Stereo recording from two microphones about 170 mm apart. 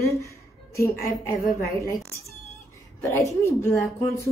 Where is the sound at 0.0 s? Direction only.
15° left (ahead or behind).